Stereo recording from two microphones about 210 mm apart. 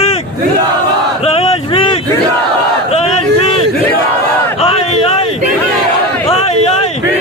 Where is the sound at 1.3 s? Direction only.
25° left (ahead or behind).